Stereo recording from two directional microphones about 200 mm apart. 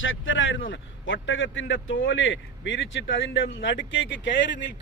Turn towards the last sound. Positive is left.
turn(degrees=65)  # may be behind; listen again after turning